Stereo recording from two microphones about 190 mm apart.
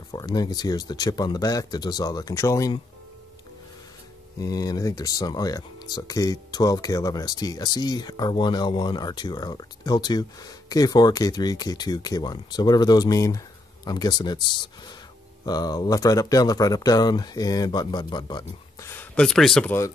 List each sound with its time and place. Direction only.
0.1 s speech: 20° left (ahead or behind)
4.4 s speech: 20° left (ahead or behind)
18.9 s speech: 10° left (ahead or behind)